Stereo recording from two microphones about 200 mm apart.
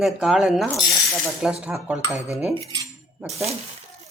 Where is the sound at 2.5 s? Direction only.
25° right (ahead or behind).